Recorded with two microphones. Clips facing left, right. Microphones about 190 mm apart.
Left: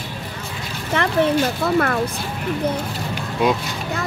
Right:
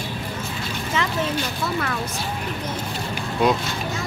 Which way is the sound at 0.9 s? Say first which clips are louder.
Left 7 dB; 60° left (ahead or behind).